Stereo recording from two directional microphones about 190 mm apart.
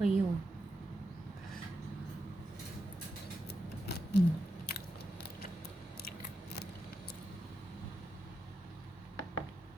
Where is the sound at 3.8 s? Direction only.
60° left (ahead or behind).